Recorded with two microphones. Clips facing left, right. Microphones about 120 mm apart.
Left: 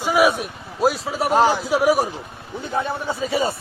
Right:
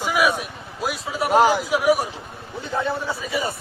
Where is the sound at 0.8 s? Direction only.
40° left (ahead or behind).